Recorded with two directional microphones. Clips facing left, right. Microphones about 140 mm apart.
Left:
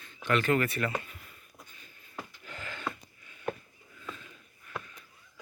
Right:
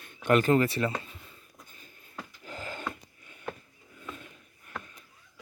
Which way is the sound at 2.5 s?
40° right (ahead or behind).